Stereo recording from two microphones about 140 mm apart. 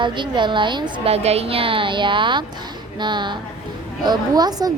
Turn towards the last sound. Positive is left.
turn(degrees=-30)  # may be behind; listen again after turning